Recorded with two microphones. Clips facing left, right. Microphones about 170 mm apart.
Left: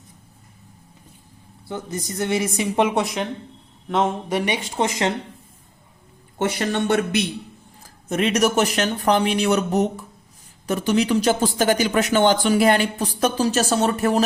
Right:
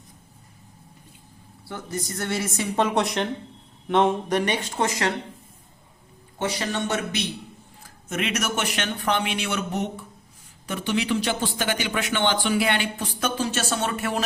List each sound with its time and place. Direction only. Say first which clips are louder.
1.6 s speech: left 3 dB; 20° left (ahead or behind)
2.9 s speech: left 1 dB; centre (ahead or behind); by 5.1 s 20° left (ahead or behind)
6.4 s a man's voice: left 5 dB; 60° left (ahead or behind)
8.1 s speech: left 8 dB; 35° left (ahead or behind)